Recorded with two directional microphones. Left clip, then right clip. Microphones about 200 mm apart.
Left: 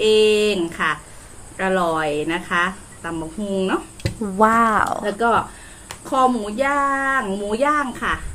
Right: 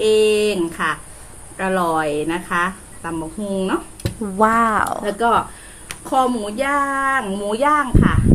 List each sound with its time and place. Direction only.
0.0 s a sound: 10° right (ahead or behind)
1.5 s speech: 10° right (ahead or behind)
4.0 s speech: centre (ahead or behind)
5.0 s speech: 15° right (ahead or behind)